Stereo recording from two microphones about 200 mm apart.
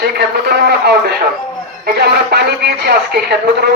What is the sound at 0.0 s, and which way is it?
Speech, 55° right (ahead or behind).